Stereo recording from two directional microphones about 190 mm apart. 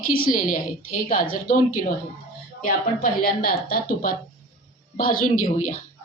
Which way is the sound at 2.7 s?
50° left (ahead or behind).